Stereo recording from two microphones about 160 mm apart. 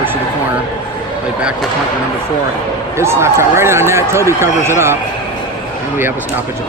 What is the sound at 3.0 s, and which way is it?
Speech, 15° right (ahead or behind).